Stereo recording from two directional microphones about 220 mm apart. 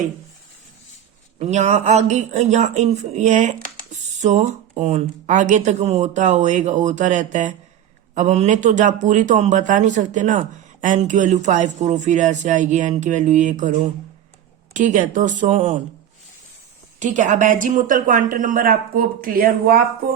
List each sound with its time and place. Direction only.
1.4 s a man's voice: 30° right (ahead or behind)
17.0 s a man's voice: 35° right (ahead or behind)